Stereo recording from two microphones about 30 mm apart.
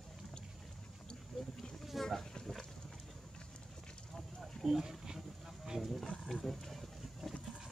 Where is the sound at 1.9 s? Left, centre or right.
Centre.